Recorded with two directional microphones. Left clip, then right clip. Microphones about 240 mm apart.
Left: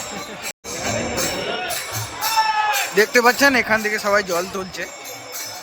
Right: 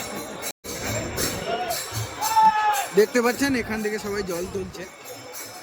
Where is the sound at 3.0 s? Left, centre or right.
Centre.